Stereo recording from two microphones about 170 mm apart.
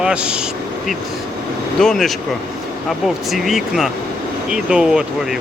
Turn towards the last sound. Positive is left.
turn(degrees=-5)  # may be behind; listen again after turning